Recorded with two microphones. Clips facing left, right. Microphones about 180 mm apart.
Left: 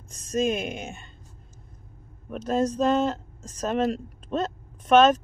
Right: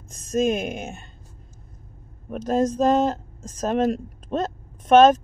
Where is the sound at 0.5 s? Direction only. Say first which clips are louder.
Right 3 dB; 50° right (ahead or behind).